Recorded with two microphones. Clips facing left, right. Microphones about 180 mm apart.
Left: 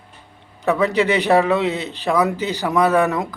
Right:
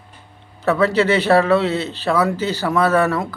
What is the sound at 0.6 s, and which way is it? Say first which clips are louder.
A man's voice: right 1 dB; 15° left (ahead or behind).